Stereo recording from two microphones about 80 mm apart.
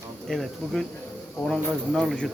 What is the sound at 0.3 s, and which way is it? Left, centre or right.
Speech, centre.